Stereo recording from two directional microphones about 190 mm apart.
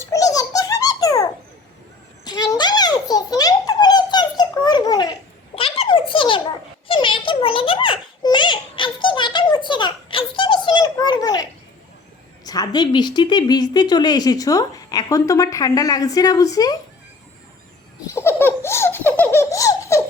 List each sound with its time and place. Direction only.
0.0 s giggle: 15° left (ahead or behind)
2.2 s a sound: 20° left (ahead or behind)
6.8 s baby laughter: 25° left (ahead or behind)
12.5 s a woman's voice: 20° left (ahead or behind)
18.0 s laughter: 15° left (ahead or behind)